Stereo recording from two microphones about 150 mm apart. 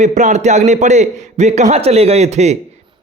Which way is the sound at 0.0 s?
55° right (ahead or behind).